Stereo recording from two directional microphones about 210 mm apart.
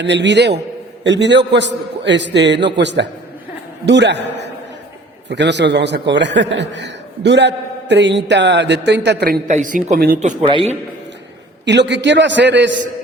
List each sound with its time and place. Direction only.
0.0 s a man's voice: 55° right (ahead or behind)
10.2 s speech: 30° right (ahead or behind)
11.6 s a man's voice: 55° right (ahead or behind)